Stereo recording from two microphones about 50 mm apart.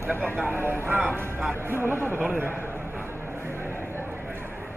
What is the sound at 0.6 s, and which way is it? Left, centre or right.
Speech, right.